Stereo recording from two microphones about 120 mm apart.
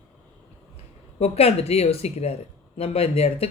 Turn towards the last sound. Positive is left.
turn(degrees=60)  # may be behind; listen again after turning